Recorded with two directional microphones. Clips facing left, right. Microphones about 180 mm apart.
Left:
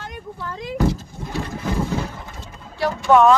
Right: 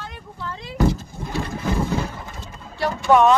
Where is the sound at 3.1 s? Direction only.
10° right (ahead or behind).